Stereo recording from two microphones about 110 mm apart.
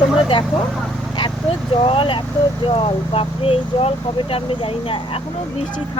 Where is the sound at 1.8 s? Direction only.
50° left (ahead or behind).